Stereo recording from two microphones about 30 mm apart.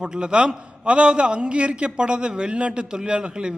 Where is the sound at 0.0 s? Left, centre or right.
Right.